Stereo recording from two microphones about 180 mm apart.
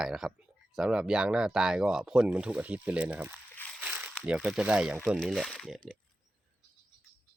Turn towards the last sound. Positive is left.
turn(degrees=0)  # may be behind; listen again after turning